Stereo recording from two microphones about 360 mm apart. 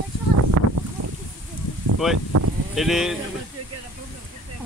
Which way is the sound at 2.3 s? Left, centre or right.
Right.